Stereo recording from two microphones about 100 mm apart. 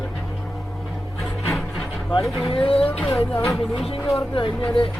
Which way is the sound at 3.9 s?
70° left (ahead or behind).